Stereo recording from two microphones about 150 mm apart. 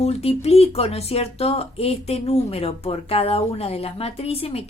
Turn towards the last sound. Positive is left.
turn(degrees=40)  # may be behind; listen again after turning